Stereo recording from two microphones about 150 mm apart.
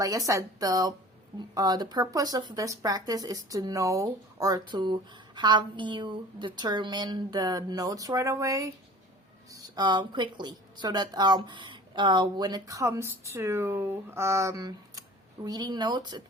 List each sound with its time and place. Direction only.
0.0 s speech: 20° right (ahead or behind)